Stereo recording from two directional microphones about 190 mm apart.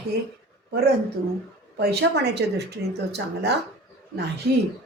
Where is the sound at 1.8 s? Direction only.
60° right (ahead or behind).